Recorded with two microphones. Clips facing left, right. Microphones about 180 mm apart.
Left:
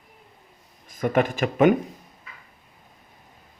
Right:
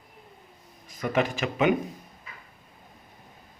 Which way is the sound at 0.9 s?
50° left (ahead or behind).